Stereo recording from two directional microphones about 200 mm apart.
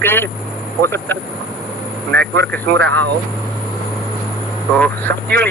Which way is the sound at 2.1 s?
55° right (ahead or behind).